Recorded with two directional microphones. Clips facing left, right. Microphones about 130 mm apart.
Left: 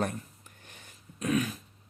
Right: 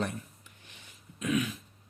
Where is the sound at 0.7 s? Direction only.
40° left (ahead or behind).